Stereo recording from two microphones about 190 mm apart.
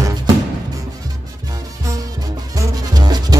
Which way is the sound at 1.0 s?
20° right (ahead or behind).